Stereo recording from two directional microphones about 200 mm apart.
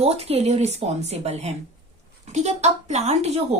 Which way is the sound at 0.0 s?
30° right (ahead or behind).